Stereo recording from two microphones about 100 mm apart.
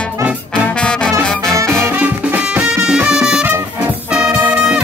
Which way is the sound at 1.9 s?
15° right (ahead or behind).